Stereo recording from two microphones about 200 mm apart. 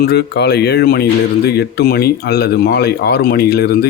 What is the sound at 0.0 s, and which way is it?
Speech, 55° left (ahead or behind).